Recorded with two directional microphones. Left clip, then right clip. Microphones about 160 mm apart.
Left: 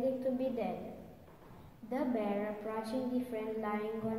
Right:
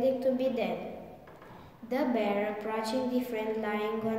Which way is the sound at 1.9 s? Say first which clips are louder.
Right 6 dB; 20° right (ahead or behind).